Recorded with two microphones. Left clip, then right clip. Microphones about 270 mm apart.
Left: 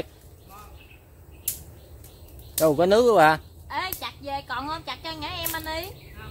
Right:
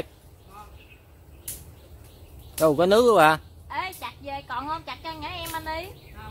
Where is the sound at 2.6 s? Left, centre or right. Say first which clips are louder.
Even; centre.